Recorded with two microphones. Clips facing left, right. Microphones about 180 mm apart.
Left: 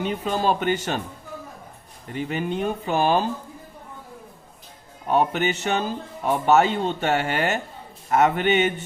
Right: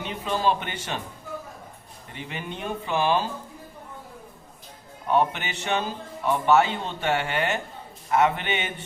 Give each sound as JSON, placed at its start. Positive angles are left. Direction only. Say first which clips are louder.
{"t": 0.0, "sound": "a man's voice", "louder": "left 2 dB", "side_deg": 45}
{"t": 2.1, "sound": "a man's voice", "louder": "left 9 dB", "side_deg": 45}
{"t": 5.0, "sound": "a man's voice", "louder": "left 3 dB", "side_deg": 45}